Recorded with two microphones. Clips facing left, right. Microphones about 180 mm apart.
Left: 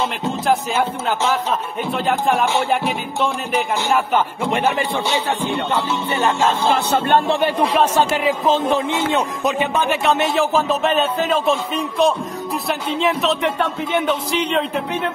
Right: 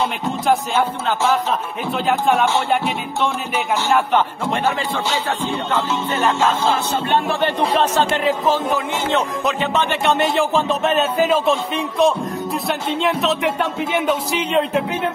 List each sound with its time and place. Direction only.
1.9 s speech: centre (ahead or behind)
4.5 s music: 15° left (ahead or behind)
8.5 s speech: 20° left (ahead or behind); by 14.8 s centre (ahead or behind)